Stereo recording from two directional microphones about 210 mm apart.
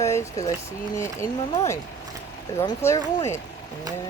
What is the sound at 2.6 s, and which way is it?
Speech, 15° left (ahead or behind).